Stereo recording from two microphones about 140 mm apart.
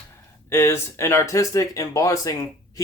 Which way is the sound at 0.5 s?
20° left (ahead or behind).